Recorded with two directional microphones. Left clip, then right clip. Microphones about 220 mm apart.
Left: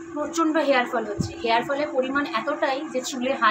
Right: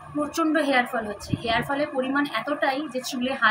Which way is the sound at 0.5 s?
10° left (ahead or behind).